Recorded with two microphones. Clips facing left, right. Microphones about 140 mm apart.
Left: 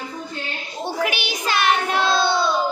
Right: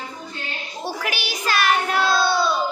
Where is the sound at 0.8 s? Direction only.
20° left (ahead or behind).